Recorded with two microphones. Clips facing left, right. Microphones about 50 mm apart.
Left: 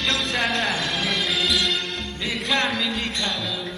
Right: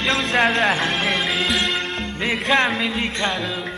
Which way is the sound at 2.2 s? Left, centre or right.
Right.